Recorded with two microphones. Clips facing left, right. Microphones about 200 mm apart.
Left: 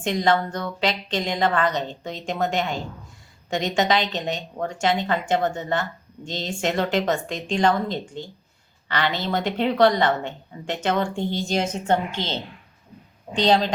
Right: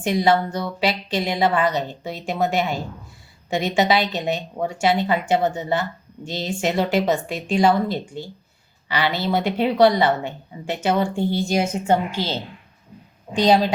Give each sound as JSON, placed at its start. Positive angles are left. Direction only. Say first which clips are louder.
{"t": 0.1, "sound": "a woman's voice", "louder": "right 3 dB", "side_deg": -15}